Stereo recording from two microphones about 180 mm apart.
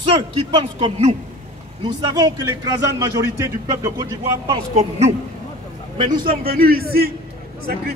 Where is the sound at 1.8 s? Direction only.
25° right (ahead or behind).